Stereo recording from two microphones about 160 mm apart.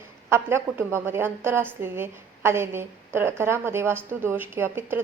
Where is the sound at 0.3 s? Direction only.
15° right (ahead or behind).